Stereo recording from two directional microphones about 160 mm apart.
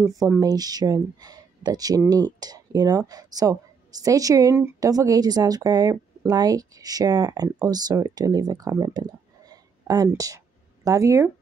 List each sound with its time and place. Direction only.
0.0 s speech: 20° right (ahead or behind)